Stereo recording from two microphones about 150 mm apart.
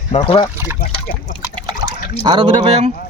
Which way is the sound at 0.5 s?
15° right (ahead or behind).